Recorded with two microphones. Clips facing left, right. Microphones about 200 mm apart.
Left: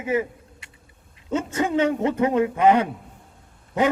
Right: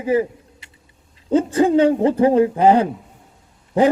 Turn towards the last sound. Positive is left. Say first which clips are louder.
# right 6 dB
turn(degrees=-30)  # may be behind; listen again after turning